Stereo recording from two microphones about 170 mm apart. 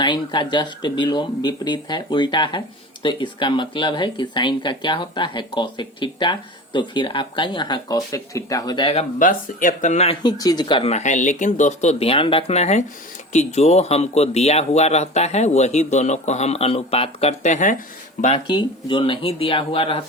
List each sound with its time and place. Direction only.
0.0 s speech: 25° left (ahead or behind)
9.1 s speech: 50° left (ahead or behind)
10.2 s a man's voice: 25° left (ahead or behind); by 17.7 s 45° left (ahead or behind)
18.4 s a man's voice: 30° left (ahead or behind)